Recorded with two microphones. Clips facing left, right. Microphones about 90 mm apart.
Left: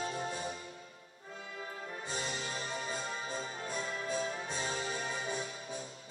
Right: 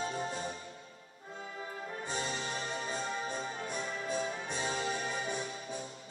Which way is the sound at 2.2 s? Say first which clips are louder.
Right 2 dB; 25° right (ahead or behind).